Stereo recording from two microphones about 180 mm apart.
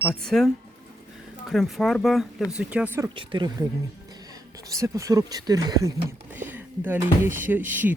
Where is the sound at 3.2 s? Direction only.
25° right (ahead or behind).